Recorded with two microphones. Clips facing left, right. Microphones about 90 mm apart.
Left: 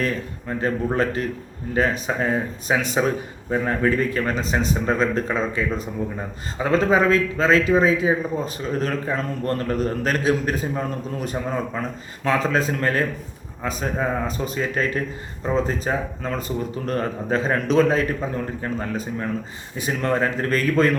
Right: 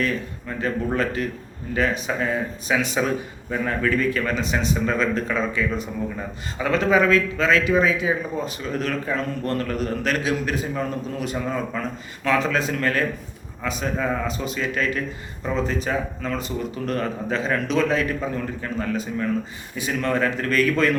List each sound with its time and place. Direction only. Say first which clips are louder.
0.0 s speech: even; 35° left (ahead or behind)